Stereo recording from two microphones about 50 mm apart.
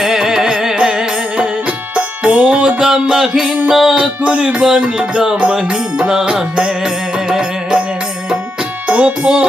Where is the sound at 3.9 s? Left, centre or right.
Right.